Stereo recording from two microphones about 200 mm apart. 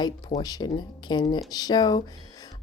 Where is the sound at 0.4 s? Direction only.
20° left (ahead or behind).